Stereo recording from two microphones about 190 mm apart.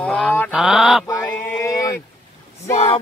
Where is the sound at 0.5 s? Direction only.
5° right (ahead or behind).